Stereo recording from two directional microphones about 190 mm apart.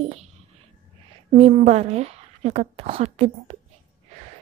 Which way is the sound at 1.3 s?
35° right (ahead or behind).